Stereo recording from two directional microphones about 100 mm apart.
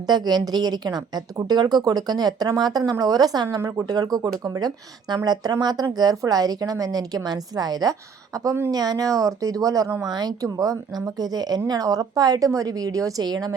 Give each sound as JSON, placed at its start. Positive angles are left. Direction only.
{"t": 0.0, "sound": "speech", "side_deg": -45}
{"t": 3.6, "sound": "speech", "side_deg": -30}